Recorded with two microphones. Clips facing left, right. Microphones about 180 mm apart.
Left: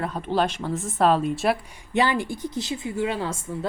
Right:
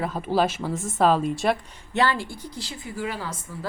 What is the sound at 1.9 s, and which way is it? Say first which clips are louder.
A woman's voice: left 1 dB; 15° left (ahead or behind).